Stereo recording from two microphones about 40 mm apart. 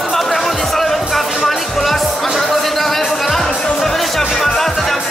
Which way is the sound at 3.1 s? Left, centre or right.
Centre.